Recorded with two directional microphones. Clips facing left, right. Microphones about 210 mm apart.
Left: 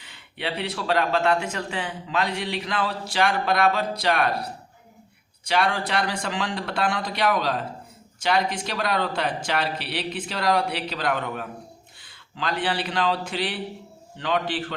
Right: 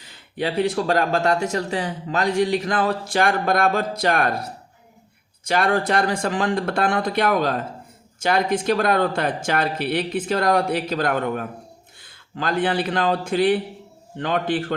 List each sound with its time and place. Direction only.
0.0 s speech: 40° right (ahead or behind)
5.5 s speech: 50° right (ahead or behind)